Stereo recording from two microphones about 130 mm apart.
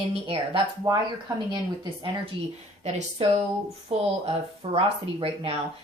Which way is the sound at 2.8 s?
60° right (ahead or behind).